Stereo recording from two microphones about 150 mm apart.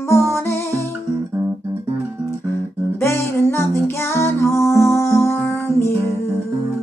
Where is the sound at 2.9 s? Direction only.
20° left (ahead or behind).